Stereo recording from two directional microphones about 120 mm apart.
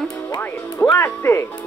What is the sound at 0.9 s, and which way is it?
Speech, 20° left (ahead or behind).